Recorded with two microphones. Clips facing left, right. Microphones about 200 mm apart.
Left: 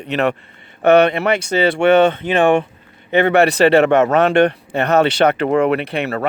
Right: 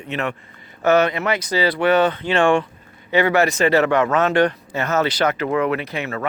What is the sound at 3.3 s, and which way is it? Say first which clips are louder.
Speech: left 7 dB; 65° left (ahead or behind).